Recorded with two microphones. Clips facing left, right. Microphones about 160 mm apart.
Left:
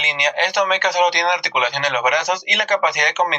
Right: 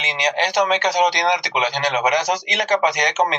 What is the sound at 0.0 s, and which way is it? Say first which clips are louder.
Speech: even; 35° right (ahead or behind).